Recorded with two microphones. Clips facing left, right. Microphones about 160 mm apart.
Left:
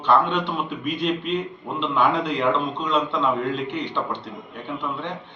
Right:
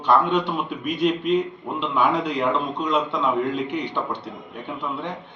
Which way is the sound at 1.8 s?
5° right (ahead or behind).